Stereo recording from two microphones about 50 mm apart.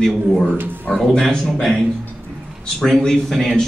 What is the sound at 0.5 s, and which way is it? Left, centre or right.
Speech, right.